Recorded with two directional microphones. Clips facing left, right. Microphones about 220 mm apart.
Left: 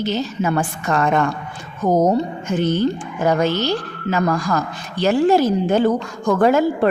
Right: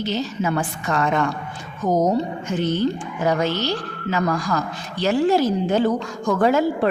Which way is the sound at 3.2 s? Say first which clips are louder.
Left 3 dB; 50° left (ahead or behind).